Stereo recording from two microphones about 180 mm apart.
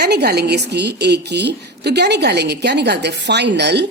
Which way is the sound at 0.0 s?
65° right (ahead or behind).